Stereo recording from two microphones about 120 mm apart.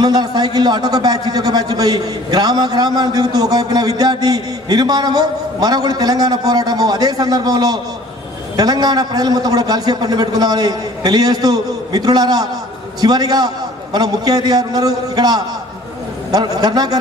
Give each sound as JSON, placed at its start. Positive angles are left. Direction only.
{"t": 0.0, "sound": "a man's voice", "side_deg": -35}